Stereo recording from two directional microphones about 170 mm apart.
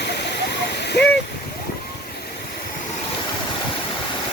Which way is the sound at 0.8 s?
80° left.